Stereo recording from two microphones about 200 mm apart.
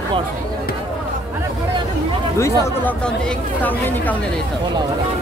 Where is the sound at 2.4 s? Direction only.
15° left (ahead or behind).